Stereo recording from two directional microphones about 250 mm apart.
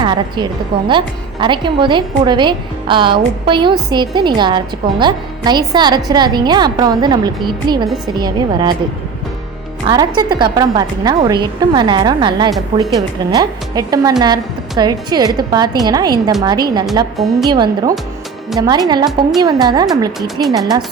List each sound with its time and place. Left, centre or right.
0.0 s a woman's voice: centre
9.8 s a woman's voice: centre
20.1 s speech: centre